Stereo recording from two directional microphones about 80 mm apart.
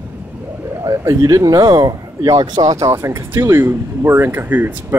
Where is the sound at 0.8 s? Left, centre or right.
Right.